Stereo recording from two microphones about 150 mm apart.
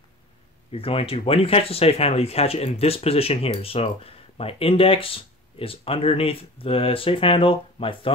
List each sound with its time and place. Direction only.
0.7 s speech: 40° left (ahead or behind)